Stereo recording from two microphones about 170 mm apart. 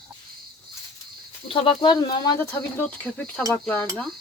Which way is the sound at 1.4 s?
30° left (ahead or behind).